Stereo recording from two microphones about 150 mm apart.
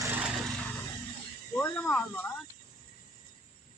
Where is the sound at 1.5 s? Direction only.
15° left (ahead or behind).